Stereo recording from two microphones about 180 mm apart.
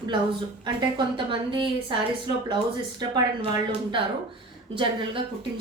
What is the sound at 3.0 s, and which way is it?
A woman's voice, 25° right (ahead or behind).